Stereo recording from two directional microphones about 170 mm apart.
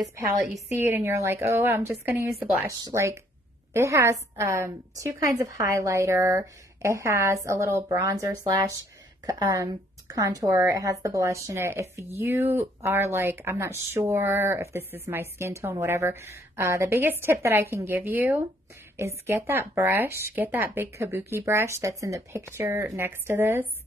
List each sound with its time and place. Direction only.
0.0 s speech: 20° right (ahead or behind)